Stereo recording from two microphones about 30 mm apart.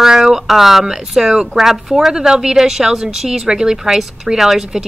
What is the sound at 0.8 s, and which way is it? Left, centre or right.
Speech, centre.